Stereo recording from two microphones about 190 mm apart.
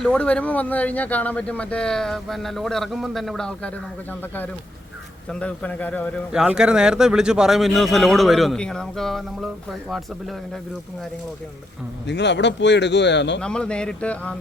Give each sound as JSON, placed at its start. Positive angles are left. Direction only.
{"t": 0.0, "sound": "speech", "side_deg": 5}
{"t": 5.3, "sound": "speech", "side_deg": 5}
{"t": 6.3, "sound": "speech", "side_deg": -5}
{"t": 12.0, "sound": "speech", "side_deg": 65}
{"t": 13.4, "sound": "speech", "side_deg": 5}